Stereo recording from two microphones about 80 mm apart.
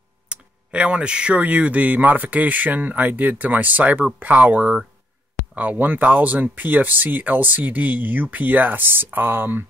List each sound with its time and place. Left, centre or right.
0.3 s speech: centre